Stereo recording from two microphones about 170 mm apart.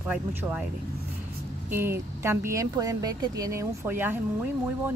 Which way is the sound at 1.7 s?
15° right (ahead or behind).